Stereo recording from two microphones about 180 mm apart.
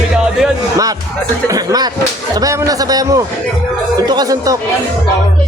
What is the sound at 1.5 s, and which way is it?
A man's voice, 20° right (ahead or behind).